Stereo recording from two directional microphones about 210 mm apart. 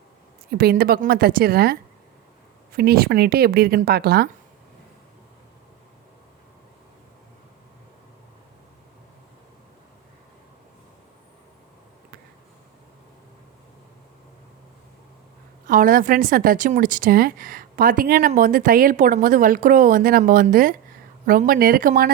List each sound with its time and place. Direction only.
0.5 s a woman's voice: 45° right (ahead or behind)
15.6 s a woman's voice: 40° right (ahead or behind)